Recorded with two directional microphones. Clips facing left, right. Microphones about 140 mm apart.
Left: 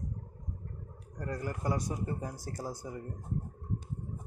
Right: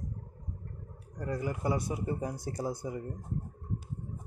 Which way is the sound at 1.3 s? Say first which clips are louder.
Right 3 dB; 10° right (ahead or behind).